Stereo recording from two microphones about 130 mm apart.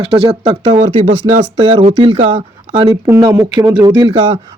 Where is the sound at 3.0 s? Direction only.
25° right (ahead or behind).